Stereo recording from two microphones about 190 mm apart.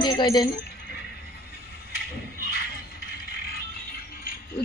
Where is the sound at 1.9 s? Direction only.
55° left (ahead or behind).